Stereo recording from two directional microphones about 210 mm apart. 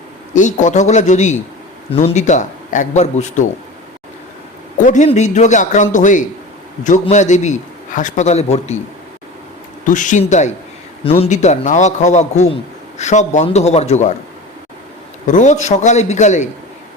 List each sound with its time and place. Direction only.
0.3 s a man's voice: 35° left (ahead or behind)
4.9 s a man's voice: 35° left (ahead or behind)
9.8 s a man's voice: 35° left (ahead or behind)
15.3 s a man's voice: 35° left (ahead or behind)